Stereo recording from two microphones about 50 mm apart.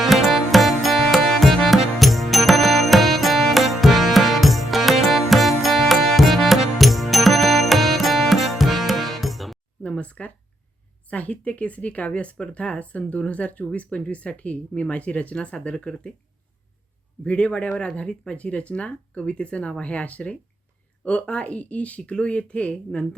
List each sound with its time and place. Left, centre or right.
0.0 s music: centre
9.8 s a sound: left
11.1 s speech: left
17.2 s speech: left